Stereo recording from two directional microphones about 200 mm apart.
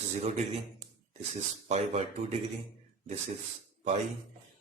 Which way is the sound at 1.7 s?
35° right (ahead or behind).